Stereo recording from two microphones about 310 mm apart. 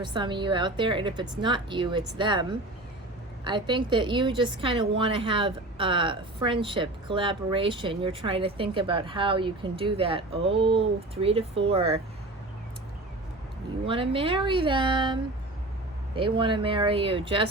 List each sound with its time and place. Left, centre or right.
0.0 s a woman's voice: centre
13.8 s a woman's voice: centre